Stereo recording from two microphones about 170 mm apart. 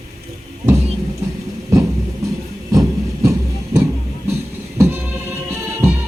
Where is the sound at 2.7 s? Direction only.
20° right (ahead or behind).